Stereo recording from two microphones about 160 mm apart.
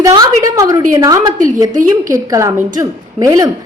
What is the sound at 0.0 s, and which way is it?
A woman's voice, 20° right (ahead or behind).